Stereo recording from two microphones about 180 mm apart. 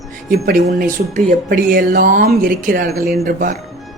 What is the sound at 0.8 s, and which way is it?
Speech, 50° right (ahead or behind).